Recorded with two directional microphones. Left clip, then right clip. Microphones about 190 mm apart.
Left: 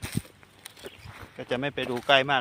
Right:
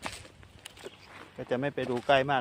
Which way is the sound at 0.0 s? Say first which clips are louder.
Left 2 dB; 55° left (ahead or behind).